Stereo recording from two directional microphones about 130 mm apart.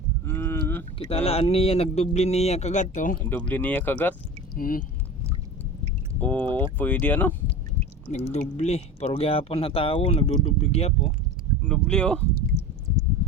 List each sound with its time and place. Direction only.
0.3 s a sound: 20° left (ahead or behind)
0.9 s speech: 45° left (ahead or behind); by 3.2 s 75° left (ahead or behind)
3.2 s speech: 10° left (ahead or behind)
4.5 s speech: 90° left
6.1 s speech: 15° left (ahead or behind)
8.1 s speech: 60° left (ahead or behind)
11.6 s speech: 5° left (ahead or behind)
12.5 s a sound: 25° right (ahead or behind)